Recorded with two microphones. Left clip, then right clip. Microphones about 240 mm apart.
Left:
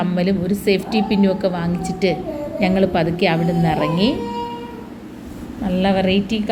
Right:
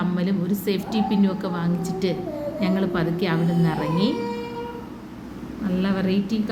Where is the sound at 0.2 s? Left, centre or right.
Centre.